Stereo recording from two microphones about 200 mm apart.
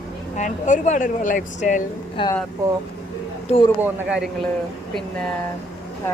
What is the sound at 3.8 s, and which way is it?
Speech, 5° right (ahead or behind).